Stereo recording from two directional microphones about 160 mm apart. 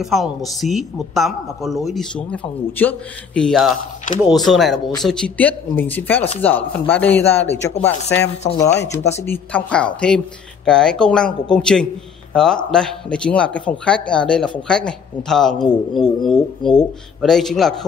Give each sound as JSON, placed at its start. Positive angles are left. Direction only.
{"t": 0.0, "sound": "a woman's voice", "side_deg": 0}